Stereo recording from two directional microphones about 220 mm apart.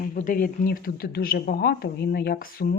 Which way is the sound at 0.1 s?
35° left (ahead or behind).